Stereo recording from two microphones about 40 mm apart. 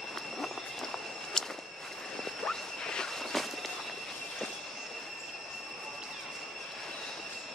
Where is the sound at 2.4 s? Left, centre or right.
Centre.